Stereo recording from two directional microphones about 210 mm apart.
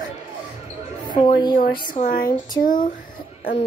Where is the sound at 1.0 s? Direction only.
20° left (ahead or behind).